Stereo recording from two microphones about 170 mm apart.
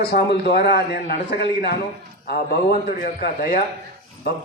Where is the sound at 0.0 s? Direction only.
70° left (ahead or behind).